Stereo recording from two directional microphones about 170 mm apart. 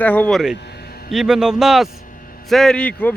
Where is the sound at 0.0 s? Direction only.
10° left (ahead or behind).